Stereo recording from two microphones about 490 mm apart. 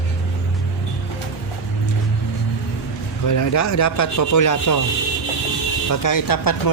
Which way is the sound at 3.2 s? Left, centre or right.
Left.